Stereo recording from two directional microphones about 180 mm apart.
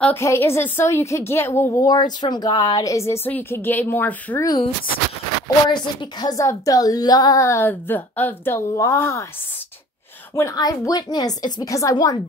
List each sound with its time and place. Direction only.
0.0 s a woman's voice: 15° left (ahead or behind)
5.7 s a woman's voice: 25° left (ahead or behind)
10.3 s a woman's voice: 20° left (ahead or behind)